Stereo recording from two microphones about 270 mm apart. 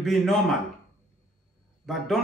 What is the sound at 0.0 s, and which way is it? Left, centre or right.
Speech, centre.